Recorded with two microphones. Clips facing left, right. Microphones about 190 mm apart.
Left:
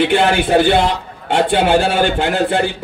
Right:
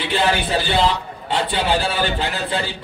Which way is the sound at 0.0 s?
60° left (ahead or behind).